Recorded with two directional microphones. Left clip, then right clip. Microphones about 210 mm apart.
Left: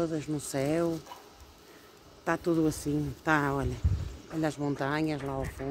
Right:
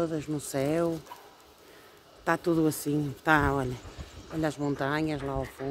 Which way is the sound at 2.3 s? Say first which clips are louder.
Right 2 dB; 10° right (ahead or behind).